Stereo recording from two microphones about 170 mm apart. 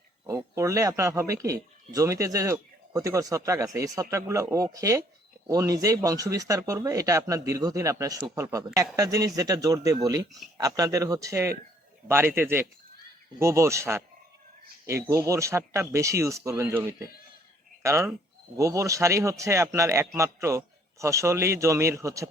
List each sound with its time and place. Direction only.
0.3 s speech: 20° right (ahead or behind)